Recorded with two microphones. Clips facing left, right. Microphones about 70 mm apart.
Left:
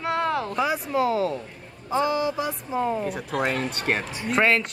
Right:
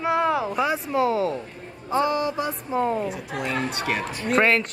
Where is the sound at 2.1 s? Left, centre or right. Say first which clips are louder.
Even; right.